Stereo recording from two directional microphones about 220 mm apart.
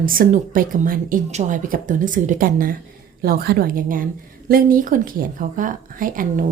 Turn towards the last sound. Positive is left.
turn(degrees=-40)  # may be behind; listen again after turning